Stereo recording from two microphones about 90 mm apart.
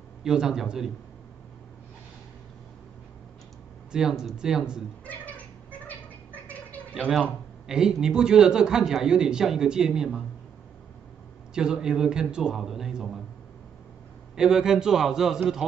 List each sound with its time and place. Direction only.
0.2 s a man's voice: 5° right (ahead or behind)
3.9 s speech: 5° right (ahead or behind)
5.0 s a sound: 15° left (ahead or behind)
6.9 s a man's voice: centre (ahead or behind)
11.5 s a man's voice: 10° right (ahead or behind)
14.3 s a man's voice: 5° right (ahead or behind)